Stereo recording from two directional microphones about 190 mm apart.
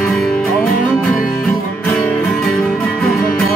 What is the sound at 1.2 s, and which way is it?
Music, 15° left (ahead or behind).